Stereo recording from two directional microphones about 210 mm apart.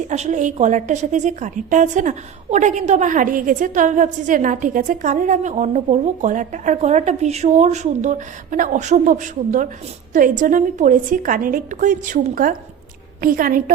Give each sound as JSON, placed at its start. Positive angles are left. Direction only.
{"t": 0.1, "sound": "a woman's voice", "side_deg": -35}